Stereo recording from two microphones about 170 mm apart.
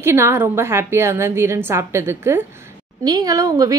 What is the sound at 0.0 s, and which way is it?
A woman's voice, 15° right (ahead or behind).